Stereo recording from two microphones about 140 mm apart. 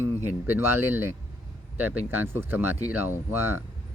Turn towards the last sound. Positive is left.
turn(degrees=-15)  # may be behind; listen again after turning